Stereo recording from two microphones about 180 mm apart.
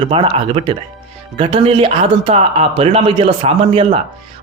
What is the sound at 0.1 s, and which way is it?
A man's voice, 30° right (ahead or behind).